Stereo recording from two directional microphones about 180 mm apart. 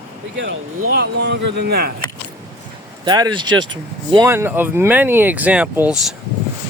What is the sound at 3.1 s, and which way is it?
Speech, 25° right (ahead or behind).